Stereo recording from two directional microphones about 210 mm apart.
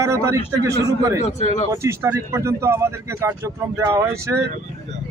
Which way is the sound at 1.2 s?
35° left (ahead or behind).